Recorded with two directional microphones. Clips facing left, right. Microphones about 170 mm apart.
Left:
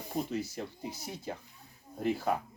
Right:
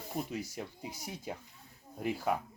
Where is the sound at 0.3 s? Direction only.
10° right (ahead or behind).